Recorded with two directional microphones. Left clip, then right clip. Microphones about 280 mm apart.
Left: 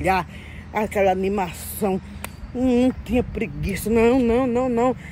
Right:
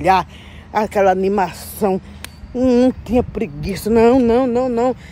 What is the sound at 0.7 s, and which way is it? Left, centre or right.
A woman's voice, centre.